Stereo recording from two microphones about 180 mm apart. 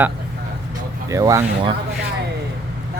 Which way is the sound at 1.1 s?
15° right (ahead or behind).